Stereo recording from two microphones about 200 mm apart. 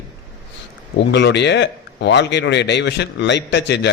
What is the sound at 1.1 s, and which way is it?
A man's voice, 60° left (ahead or behind).